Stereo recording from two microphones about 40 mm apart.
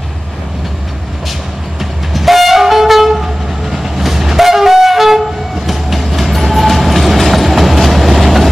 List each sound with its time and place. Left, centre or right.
2.1 s train: centre